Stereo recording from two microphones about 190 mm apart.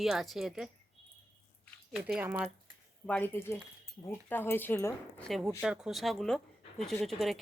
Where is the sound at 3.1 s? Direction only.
10° left (ahead or behind).